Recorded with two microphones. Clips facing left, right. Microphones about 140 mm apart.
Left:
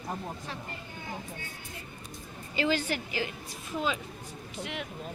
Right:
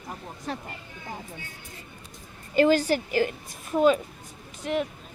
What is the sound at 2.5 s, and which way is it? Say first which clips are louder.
A woman's voice: right 9 dB; 50° right (ahead or behind).